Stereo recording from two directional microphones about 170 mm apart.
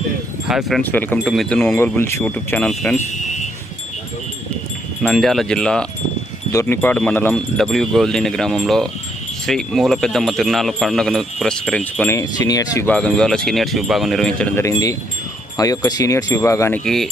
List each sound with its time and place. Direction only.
0.4 s speech: 5° right (ahead or behind)
0.8 s speech: 10° left (ahead or behind)
1.7 s speech: 15° left (ahead or behind)
5.0 s speech: centre (ahead or behind)
6.5 s speech: 15° left (ahead or behind)
11.9 s speech: 15° left (ahead or behind)
12.9 s speech: 5° left (ahead or behind)
16.8 s speech: centre (ahead or behind)